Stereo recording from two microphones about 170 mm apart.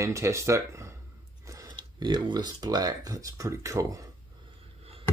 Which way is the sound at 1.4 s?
20° right (ahead or behind).